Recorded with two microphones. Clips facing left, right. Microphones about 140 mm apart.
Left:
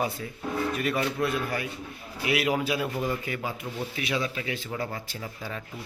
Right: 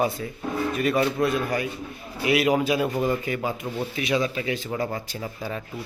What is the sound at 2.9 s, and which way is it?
Speech, 45° right (ahead or behind).